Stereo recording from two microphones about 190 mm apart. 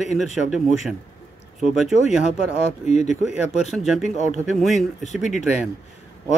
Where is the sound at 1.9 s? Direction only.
5° right (ahead or behind).